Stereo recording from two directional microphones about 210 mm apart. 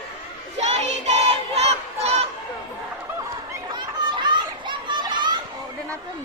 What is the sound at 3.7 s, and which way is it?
Children playing, 20° right (ahead or behind).